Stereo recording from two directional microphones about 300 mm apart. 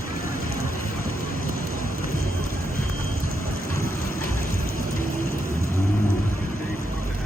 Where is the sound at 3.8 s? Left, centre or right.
Left.